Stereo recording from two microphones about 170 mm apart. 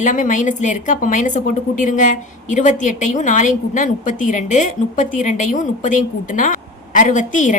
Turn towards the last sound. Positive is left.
turn(degrees=45)  # may be behind; listen again after turning